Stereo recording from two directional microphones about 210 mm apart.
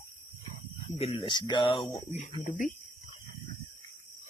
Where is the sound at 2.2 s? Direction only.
35° left (ahead or behind).